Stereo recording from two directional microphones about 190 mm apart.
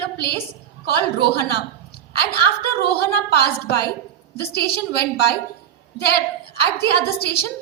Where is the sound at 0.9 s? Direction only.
55° left (ahead or behind).